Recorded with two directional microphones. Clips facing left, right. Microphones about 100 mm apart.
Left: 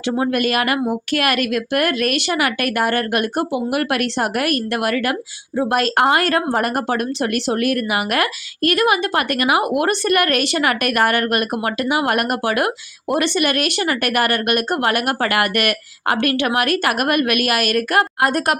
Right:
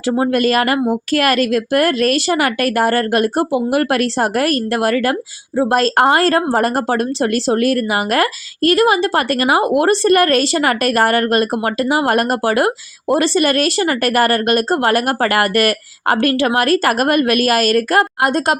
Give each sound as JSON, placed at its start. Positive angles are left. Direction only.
{"t": 0.1, "sound": "a woman's voice", "side_deg": -35}
{"t": 18.2, "sound": "a woman's voice", "side_deg": -25}